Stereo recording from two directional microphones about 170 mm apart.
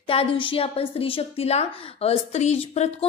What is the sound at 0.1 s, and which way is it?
A woman's voice, 35° left (ahead or behind).